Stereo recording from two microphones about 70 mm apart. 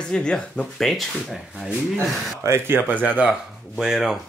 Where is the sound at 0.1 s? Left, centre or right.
Centre.